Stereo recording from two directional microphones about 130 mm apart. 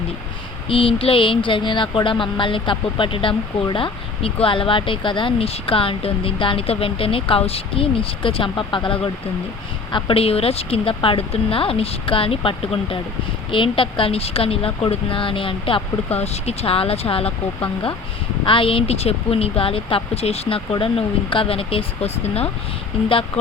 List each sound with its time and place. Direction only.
0.7 s speech: 45° left (ahead or behind)
16.1 s speech: 55° left (ahead or behind)